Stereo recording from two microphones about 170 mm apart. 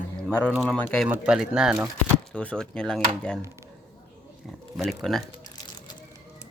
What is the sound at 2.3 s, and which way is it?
Speech, 5° left (ahead or behind).